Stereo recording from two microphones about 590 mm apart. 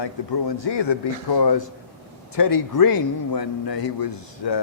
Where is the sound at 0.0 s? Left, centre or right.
Left.